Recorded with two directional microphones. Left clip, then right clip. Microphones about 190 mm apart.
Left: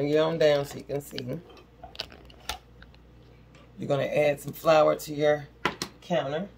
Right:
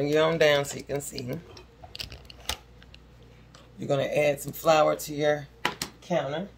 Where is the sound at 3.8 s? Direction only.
10° right (ahead or behind).